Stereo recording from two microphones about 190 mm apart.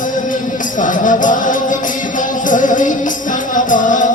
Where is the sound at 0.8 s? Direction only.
45° left (ahead or behind).